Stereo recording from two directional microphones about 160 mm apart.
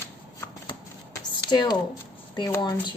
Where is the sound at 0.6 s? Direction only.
25° left (ahead or behind).